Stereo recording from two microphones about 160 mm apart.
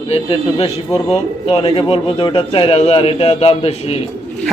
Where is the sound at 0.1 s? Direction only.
40° left (ahead or behind).